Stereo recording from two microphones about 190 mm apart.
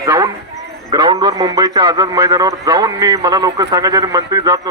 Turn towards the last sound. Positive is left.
turn(degrees=-20)  # may be behind; listen again after turning